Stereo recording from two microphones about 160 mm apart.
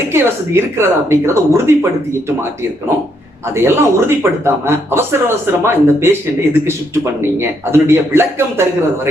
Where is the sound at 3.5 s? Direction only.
15° right (ahead or behind).